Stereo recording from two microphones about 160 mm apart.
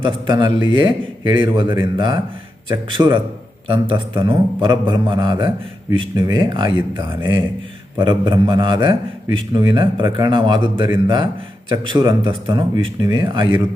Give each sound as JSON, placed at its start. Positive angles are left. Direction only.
{"t": 0.0, "sound": "a man's voice", "side_deg": -30}